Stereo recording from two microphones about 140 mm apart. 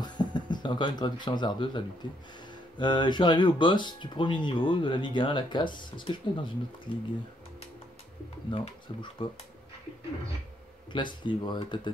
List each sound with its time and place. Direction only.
0.0 s speech: 30° left (ahead or behind)
8.5 s speech: 35° left (ahead or behind)
10.9 s speech: 35° left (ahead or behind)